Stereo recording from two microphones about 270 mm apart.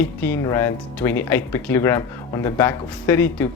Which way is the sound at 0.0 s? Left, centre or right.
Centre.